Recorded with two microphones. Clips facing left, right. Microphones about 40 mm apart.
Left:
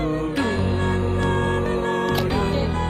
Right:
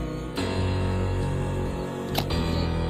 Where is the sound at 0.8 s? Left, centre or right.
Left.